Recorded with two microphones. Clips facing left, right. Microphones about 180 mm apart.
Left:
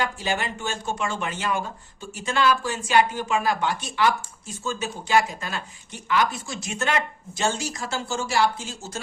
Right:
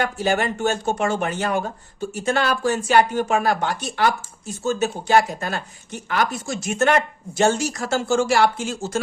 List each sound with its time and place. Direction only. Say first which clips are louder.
0.0 s speech: right 6 dB; 55° right (ahead or behind)
1.0 s speech: right 4 dB; 40° right (ahead or behind)
3.1 s speech: right 7 dB; 55° right (ahead or behind)
3.3 s speech: right 1 dB; 45° right (ahead or behind)
7.8 s speech: right 8 dB; 65° right (ahead or behind)